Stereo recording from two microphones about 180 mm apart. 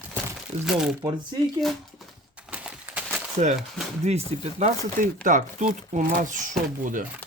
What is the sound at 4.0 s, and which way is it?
Speech, 40° right (ahead or behind).